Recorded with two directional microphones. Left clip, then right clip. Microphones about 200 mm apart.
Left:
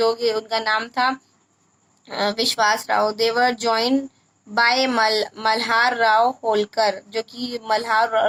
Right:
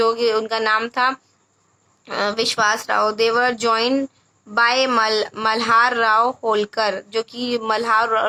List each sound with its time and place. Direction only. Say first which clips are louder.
0.0 s speech: right 2 dB; 20° right (ahead or behind)